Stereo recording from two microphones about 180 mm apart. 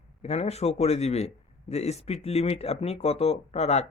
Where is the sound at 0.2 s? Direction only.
35° left (ahead or behind).